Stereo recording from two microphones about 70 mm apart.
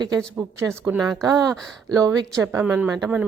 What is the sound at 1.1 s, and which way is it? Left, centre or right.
A woman's voice, right.